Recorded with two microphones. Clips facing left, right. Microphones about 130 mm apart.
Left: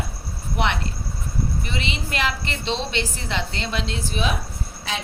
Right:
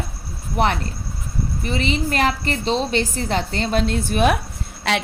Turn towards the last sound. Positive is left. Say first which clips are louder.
# right 8 dB
turn(degrees=-70)  # may be behind; listen again after turning